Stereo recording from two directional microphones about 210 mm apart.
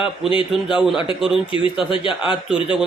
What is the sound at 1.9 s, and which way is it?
Speech, 25° left (ahead or behind).